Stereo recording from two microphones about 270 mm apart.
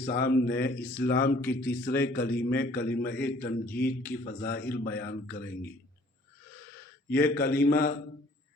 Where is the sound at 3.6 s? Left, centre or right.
Centre.